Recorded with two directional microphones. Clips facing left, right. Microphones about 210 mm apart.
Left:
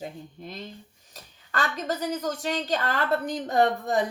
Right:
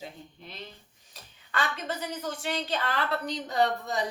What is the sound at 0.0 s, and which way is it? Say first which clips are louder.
Speech: left 6 dB; 45° left (ahead or behind).